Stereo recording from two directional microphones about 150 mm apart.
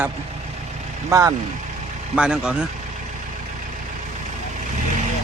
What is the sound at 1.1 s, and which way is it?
Speech, 20° right (ahead or behind).